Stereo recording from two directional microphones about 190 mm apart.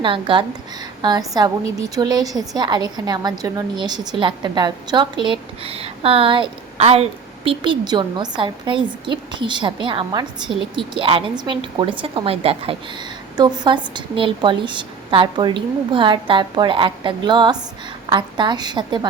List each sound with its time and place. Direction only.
0.0 s a woman's voice: 25° right (ahead or behind)